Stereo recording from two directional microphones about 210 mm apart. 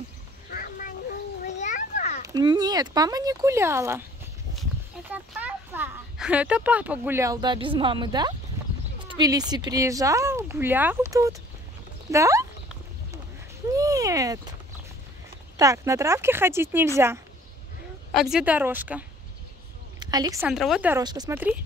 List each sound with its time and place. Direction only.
0.5 s a sound: 40° left (ahead or behind)
1.4 s children playing: 35° left (ahead or behind)
2.2 s speech: 20° right (ahead or behind)
5.1 s a child's voice: 10° right (ahead or behind)
13.7 s a sound: 15° right (ahead or behind)
15.5 s speech: 15° right (ahead or behind)
20.0 s a woman's voice: 20° right (ahead or behind)
20.4 s speech: centre (ahead or behind)
21.0 s speech: 20° right (ahead or behind)